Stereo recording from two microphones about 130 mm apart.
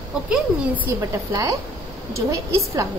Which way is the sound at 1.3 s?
25° right (ahead or behind).